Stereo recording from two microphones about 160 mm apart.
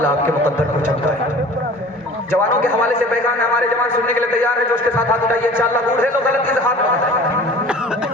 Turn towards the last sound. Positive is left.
turn(degrees=15)  # may be behind; listen again after turning